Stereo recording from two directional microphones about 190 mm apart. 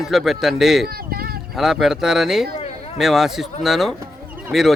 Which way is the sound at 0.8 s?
55° right (ahead or behind).